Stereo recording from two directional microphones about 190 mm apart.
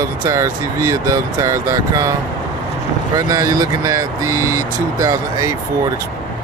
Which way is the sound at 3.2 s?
20° right (ahead or behind).